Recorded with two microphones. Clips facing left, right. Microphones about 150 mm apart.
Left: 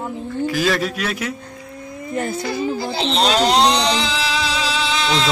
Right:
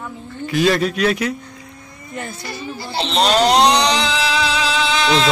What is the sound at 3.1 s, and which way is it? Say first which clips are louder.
Music: right 2 dB; 65° right (ahead or behind).